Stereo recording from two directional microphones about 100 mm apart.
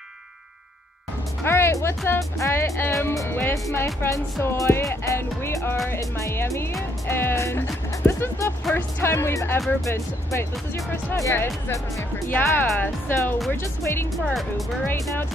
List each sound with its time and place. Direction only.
1.4 s speech: 25° left (ahead or behind)
14.1 s speech: centre (ahead or behind)